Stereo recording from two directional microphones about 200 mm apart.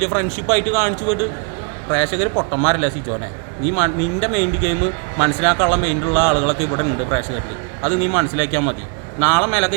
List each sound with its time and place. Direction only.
0.0 s speech: 5° left (ahead or behind)